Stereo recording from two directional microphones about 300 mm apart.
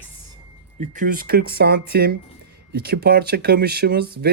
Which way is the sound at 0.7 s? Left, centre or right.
Right.